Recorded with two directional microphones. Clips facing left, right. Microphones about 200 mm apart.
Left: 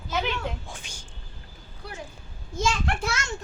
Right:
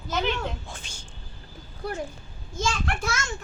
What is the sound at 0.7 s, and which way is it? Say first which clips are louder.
Speech: even; 15° left (ahead or behind).